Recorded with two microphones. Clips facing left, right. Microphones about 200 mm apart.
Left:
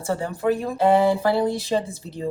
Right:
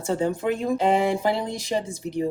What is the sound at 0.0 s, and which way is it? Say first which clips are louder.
Speech: even; 20° right (ahead or behind).